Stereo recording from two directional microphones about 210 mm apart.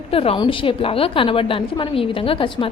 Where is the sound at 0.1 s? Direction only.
25° left (ahead or behind).